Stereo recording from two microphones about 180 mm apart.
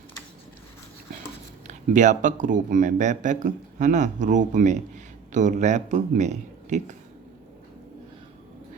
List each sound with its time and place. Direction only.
1.6 s a man's voice: 45° right (ahead or behind)